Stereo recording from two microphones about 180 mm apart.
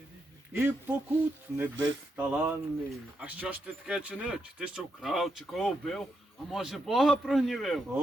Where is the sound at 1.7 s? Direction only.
90° right.